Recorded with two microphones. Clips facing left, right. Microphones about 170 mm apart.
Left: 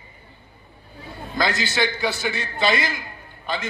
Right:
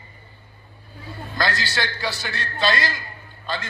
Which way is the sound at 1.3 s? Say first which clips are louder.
Left 2 dB; 20° left (ahead or behind).